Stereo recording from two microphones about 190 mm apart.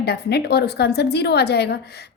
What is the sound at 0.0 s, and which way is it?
A woman's voice, 60° left (ahead or behind).